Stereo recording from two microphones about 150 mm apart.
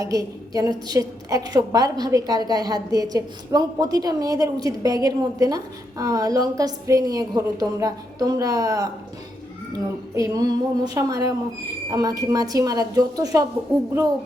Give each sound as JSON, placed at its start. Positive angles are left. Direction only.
{"t": 0.0, "sound": "a woman's voice", "side_deg": -25}
{"t": 10.2, "sound": "a woman's voice", "side_deg": -25}